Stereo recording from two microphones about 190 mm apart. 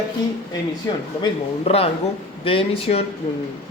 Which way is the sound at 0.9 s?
20° left (ahead or behind).